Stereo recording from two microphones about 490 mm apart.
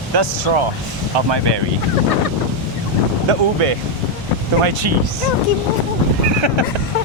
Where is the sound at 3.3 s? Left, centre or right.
Right.